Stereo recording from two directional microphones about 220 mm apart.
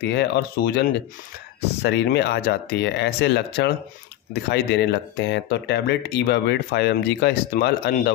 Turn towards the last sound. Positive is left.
turn(degrees=45)  # may be behind; listen again after turning